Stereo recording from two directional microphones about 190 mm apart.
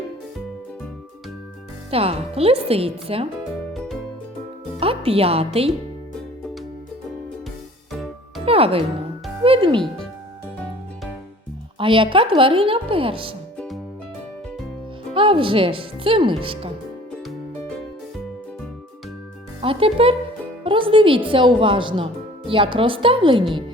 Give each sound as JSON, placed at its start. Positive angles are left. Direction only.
{"t": 1.9, "sound": "speech", "side_deg": -30}
{"t": 4.8, "sound": "speech", "side_deg": -30}
{"t": 8.4, "sound": "speech", "side_deg": -30}
{"t": 11.8, "sound": "speech", "side_deg": -25}
{"t": 15.1, "sound": "speech", "side_deg": -25}
{"t": 19.6, "sound": "speech", "side_deg": -30}